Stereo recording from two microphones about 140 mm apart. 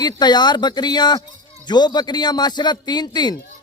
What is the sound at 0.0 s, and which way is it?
A man's voice, 30° left (ahead or behind).